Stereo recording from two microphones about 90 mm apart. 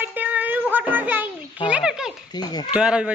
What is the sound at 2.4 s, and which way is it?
Speech, 50° left (ahead or behind).